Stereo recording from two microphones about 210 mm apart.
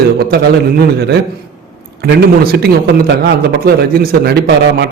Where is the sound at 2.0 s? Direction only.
50° right (ahead or behind).